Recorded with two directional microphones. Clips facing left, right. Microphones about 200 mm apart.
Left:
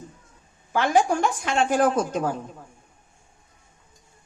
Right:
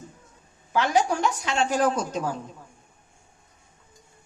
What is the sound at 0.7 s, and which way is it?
A woman's voice, 50° left (ahead or behind).